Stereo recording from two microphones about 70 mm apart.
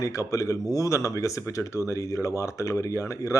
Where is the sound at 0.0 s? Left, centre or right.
Left.